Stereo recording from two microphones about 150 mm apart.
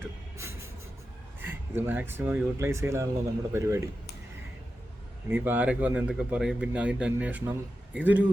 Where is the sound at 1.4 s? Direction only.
15° right (ahead or behind).